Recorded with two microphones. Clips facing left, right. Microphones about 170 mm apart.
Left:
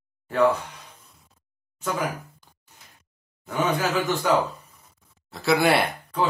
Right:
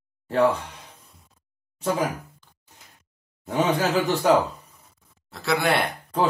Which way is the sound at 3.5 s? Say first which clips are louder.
Right 2 dB; 30° right (ahead or behind).